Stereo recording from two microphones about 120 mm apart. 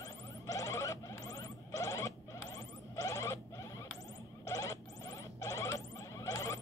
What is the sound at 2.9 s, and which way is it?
Rodents, 30° left (ahead or behind).